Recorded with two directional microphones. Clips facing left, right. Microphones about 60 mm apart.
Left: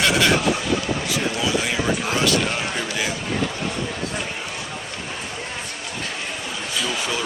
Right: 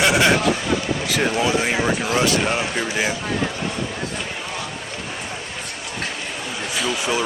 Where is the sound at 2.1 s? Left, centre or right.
Right.